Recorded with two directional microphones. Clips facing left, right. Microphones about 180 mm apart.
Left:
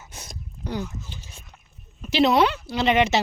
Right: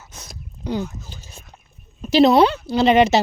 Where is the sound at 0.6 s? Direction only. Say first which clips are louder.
Right 5 dB; 20° right (ahead or behind).